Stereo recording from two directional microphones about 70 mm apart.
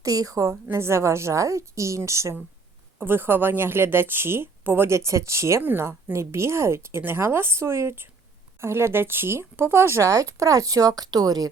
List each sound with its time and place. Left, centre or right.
0.0 s speech: right
0.7 s a woman's voice: right
3.0 s a woman's voice: right
10.1 s speech: right